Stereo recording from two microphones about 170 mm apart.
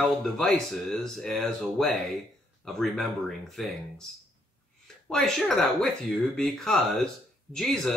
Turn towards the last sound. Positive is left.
turn(degrees=0)  # may be behind; listen again after turning